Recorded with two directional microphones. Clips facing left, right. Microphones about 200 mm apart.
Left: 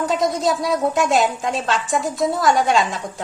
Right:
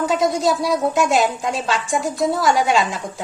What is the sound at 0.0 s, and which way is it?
Speech, centre (ahead or behind).